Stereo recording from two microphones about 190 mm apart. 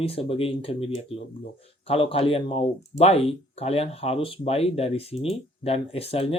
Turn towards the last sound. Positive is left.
turn(degrees=30)  # may be behind; listen again after turning